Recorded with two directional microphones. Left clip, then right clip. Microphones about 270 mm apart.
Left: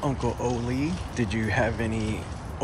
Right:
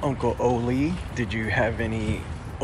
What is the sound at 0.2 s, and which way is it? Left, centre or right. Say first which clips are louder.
Speech: right 5 dB; centre.